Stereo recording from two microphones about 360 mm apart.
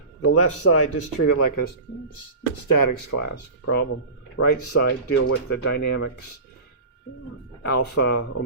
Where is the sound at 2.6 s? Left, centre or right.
Left.